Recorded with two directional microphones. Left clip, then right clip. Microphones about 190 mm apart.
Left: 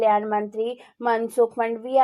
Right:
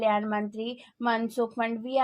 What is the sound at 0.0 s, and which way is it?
A woman's voice, 35° left (ahead or behind).